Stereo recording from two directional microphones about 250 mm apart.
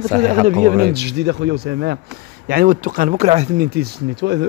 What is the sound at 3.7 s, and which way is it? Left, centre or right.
Speech, right.